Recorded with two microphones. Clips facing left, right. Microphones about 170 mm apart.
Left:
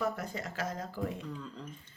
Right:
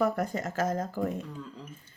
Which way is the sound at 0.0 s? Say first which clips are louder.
Right 7 dB; 50° right (ahead or behind).